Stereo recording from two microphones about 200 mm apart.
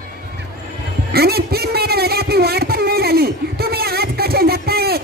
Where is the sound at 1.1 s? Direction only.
50° right (ahead or behind).